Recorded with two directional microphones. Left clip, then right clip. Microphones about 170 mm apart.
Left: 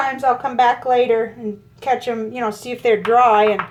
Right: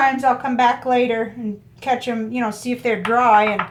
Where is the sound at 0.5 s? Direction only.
35° left (ahead or behind).